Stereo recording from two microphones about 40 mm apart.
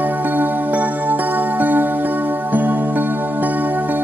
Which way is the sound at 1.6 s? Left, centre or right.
Right.